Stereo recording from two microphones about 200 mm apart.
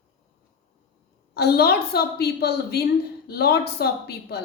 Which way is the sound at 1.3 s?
50° left (ahead or behind).